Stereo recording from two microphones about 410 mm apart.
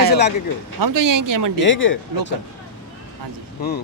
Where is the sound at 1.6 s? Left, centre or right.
Left.